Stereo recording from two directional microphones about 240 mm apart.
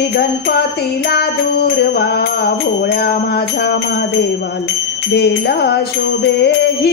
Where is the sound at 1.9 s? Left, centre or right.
Left.